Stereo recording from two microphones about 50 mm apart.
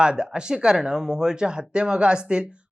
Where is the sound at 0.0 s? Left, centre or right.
Centre.